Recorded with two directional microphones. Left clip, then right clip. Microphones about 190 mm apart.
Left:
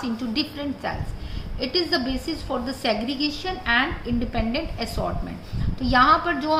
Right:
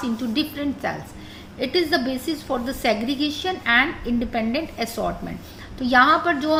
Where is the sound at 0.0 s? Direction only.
30° right (ahead or behind).